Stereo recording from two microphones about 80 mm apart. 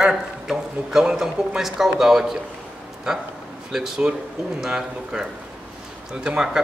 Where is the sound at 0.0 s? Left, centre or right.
Centre.